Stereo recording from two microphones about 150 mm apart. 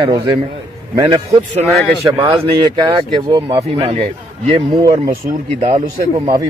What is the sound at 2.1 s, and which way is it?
A man's voice, 30° right (ahead or behind).